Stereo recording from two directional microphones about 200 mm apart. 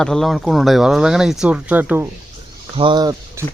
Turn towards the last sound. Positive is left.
turn(degrees=-20)  # may be behind; listen again after turning